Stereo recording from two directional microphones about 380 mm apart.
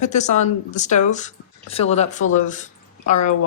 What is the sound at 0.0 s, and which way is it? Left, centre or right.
Speech, centre.